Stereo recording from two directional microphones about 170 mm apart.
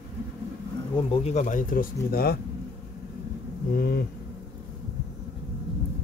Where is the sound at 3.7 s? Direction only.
65° left (ahead or behind).